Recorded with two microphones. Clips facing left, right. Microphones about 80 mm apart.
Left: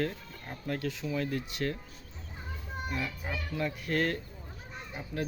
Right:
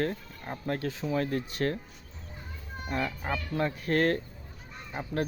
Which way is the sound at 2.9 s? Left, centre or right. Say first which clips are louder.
Right 7 dB; right.